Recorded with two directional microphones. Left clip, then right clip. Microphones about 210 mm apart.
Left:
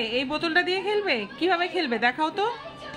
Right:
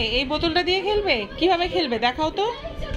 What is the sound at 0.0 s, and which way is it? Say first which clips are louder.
A woman's voice: right 4 dB; 15° left (ahead or behind).